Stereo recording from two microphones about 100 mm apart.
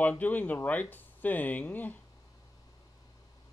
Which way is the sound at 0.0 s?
15° left (ahead or behind).